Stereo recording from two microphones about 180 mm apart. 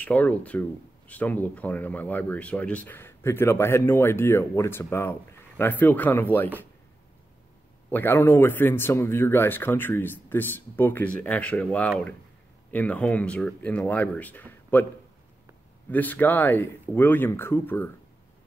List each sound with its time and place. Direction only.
0.0 s speech: 10° left (ahead or behind)
7.9 s speech: 10° left (ahead or behind)
15.9 s speech: 10° left (ahead or behind)